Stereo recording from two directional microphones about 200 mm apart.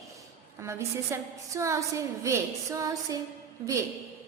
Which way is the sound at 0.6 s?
15° right (ahead or behind).